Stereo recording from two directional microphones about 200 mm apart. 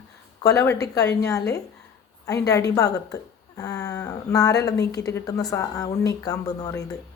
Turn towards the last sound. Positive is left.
turn(degrees=15)  # may be behind; listen again after turning